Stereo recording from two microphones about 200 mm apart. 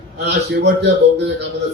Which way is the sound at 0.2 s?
60° right (ahead or behind).